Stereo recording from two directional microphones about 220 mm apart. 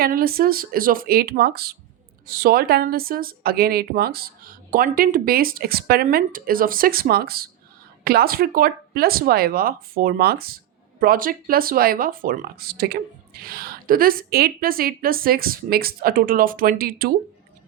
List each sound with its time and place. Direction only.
0.0 s speech: 40° right (ahead or behind)